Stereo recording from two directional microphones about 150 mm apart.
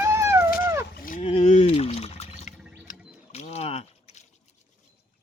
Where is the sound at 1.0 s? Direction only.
65° left (ahead or behind).